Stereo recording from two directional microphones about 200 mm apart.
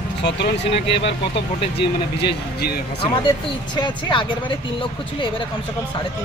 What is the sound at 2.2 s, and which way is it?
Speech, 55° left (ahead or behind).